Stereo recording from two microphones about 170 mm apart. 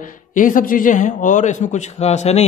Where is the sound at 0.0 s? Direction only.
50° left (ahead or behind).